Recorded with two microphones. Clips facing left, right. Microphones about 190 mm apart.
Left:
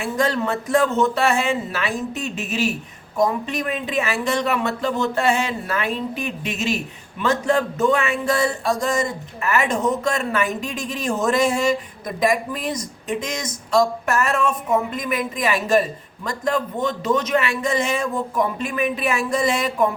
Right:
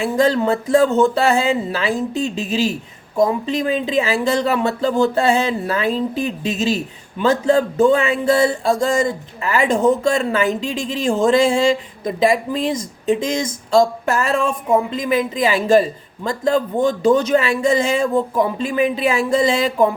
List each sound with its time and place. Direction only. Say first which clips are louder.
0.2 s speech: right 5 dB; 30° right (ahead or behind)